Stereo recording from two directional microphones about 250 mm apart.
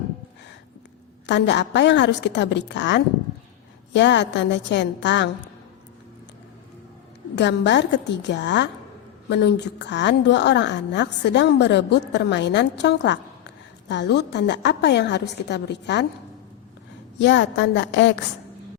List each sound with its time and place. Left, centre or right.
1.3 s a woman's voice: left
7.3 s a woman's voice: left
17.2 s a woman's voice: left